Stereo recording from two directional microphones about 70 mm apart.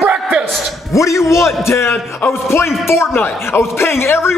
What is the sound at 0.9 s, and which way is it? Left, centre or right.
A man's voice, left.